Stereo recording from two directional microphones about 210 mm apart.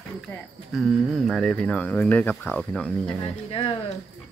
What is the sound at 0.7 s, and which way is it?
Speech, centre (ahead or behind).